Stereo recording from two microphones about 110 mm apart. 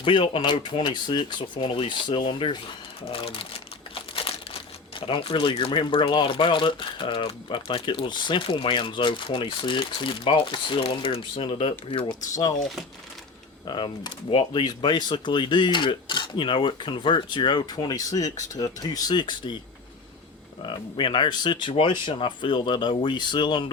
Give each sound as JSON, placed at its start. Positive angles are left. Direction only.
{"t": 0.0, "sound": "speech", "side_deg": 45}
{"t": 3.1, "sound": "speech", "side_deg": 60}
{"t": 4.1, "sound": "crumpling", "side_deg": 55}
{"t": 4.9, "sound": "speech", "side_deg": 55}
{"t": 13.7, "sound": "speech", "side_deg": 45}
{"t": 20.6, "sound": "speech", "side_deg": 45}